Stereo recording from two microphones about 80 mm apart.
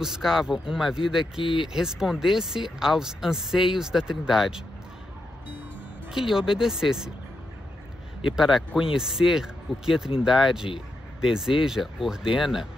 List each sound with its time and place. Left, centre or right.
0.0 s speech: centre
1.4 s speech: left
1.7 s speech: centre
6.1 s speech: centre
8.3 s speech: centre